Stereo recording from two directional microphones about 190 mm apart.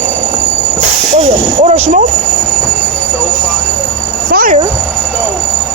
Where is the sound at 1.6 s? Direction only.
35° right (ahead or behind).